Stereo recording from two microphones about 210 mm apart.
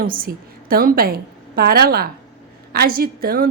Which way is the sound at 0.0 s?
45° right (ahead or behind).